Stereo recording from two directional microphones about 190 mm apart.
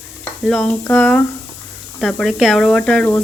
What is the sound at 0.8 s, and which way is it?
Speech, 10° left (ahead or behind).